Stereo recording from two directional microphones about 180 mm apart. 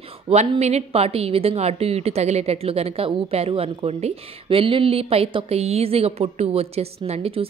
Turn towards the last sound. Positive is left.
turn(degrees=-35)  # may be behind; listen again after turning